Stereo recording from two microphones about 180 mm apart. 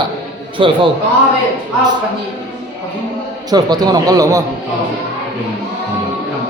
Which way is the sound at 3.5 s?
20° right (ahead or behind).